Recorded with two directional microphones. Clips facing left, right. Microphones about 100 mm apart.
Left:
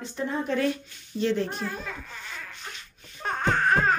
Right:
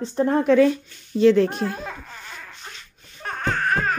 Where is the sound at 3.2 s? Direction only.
20° left (ahead or behind).